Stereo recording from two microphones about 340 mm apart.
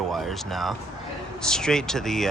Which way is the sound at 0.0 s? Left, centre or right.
Centre.